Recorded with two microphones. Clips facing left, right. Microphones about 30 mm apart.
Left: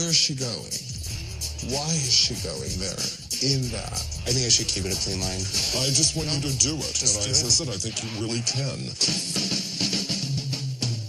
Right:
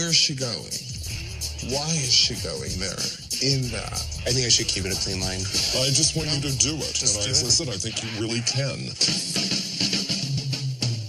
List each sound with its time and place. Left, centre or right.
0.0 s speech: right
1.9 s speech: right